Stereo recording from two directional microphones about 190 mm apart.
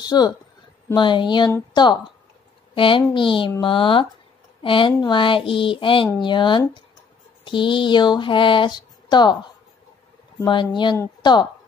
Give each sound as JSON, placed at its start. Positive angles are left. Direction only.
{"t": 0.0, "sound": "speech", "side_deg": 20}